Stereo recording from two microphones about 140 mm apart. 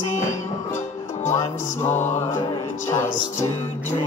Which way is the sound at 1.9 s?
55° left (ahead or behind).